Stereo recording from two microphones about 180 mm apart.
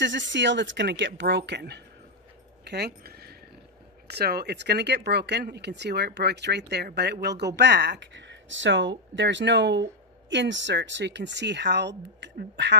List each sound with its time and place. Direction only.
0.0 s speech: 90° right; by 1.8 s 70° right (ahead or behind)
2.6 s a sound: 65° right (ahead or behind)
4.1 s speech: 60° right (ahead or behind)
10.3 s speech: 85° right